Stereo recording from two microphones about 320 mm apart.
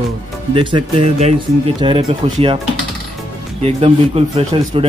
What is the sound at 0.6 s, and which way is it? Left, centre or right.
Speech, centre.